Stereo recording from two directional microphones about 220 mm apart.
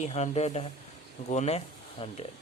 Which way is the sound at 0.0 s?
30° left (ahead or behind).